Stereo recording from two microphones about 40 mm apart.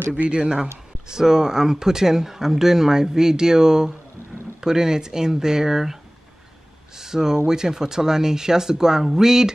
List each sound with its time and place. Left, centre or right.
0.1 s speech: right
0.6 s speech: centre
7.0 s speech: centre